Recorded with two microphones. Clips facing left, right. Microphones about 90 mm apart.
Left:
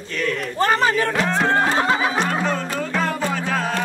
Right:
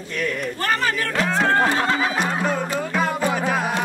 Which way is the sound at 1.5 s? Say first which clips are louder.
Left 1 dB; 20° left (ahead or behind).